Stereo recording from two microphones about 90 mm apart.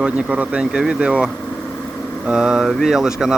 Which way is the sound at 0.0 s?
10° right (ahead or behind).